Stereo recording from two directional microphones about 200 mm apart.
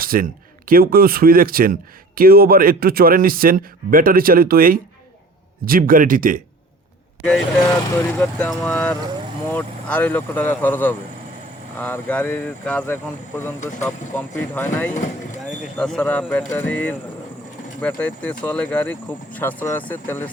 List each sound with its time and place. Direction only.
0.0 s a man's voice: 45° right (ahead or behind)
7.2 s speech: 5° left (ahead or behind)